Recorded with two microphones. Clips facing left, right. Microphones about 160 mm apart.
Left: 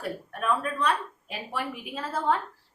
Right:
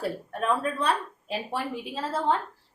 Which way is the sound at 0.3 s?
30° right (ahead or behind).